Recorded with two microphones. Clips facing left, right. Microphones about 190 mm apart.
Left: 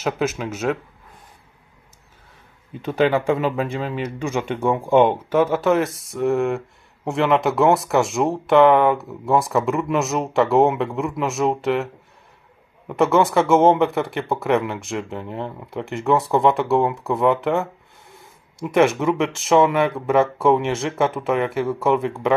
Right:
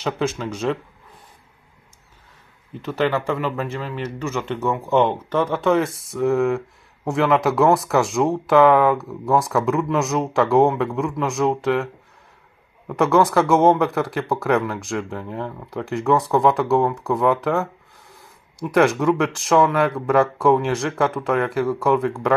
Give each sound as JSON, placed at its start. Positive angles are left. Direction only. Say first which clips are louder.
{"t": 0.0, "sound": "speech", "louder": "left 1 dB", "side_deg": 5}
{"t": 2.8, "sound": "speech", "louder": "left 3 dB", "side_deg": 15}